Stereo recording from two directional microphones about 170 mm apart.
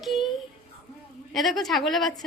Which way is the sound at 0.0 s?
Centre (ahead or behind).